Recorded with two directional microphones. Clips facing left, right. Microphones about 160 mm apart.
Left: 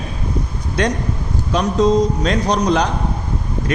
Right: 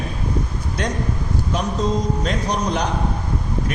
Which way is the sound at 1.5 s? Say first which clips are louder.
Left 8 dB; 90° left.